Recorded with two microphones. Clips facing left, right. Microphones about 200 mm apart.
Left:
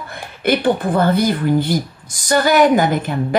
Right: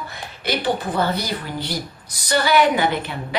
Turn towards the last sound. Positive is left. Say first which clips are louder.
# left 5 dB
turn(degrees=45)  # may be behind; listen again after turning